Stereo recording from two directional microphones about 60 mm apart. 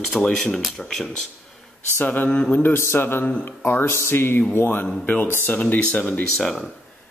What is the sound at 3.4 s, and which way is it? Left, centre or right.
Speech, left.